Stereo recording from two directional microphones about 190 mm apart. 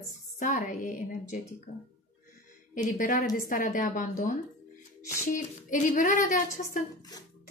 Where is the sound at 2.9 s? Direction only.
45° left (ahead or behind).